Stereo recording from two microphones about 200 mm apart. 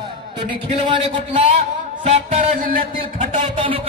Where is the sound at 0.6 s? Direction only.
25° right (ahead or behind).